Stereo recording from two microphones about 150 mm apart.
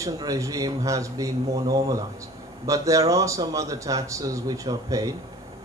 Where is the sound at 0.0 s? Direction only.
20° right (ahead or behind).